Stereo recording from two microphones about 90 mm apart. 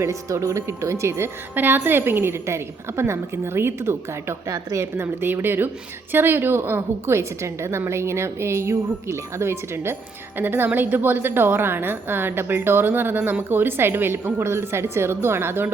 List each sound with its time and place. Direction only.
0.0 s a woman's voice: 35° right (ahead or behind)